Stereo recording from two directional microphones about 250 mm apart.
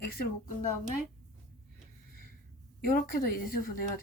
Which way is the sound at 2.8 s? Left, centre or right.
Left.